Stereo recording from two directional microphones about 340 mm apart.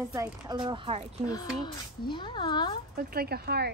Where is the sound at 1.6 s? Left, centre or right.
Centre.